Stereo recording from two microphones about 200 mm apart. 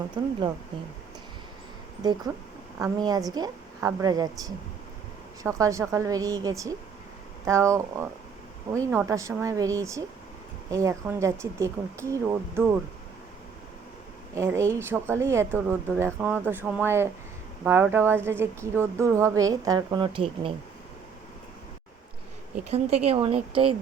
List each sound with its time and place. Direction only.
0.2 s speech: 25° right (ahead or behind)
2.7 s speech: 15° right (ahead or behind)
14.3 s speech: 15° right (ahead or behind)
22.5 s speech: 30° right (ahead or behind)